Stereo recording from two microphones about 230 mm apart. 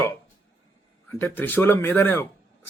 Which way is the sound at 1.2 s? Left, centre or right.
Centre.